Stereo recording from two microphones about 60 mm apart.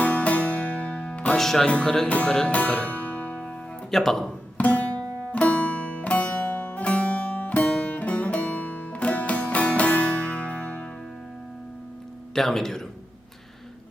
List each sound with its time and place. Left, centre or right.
0.0 s music: left
1.4 s speech: centre
2.0 s speech: left
2.3 s music: centre
3.9 s speech: centre
4.5 s music: left
12.3 s speech: centre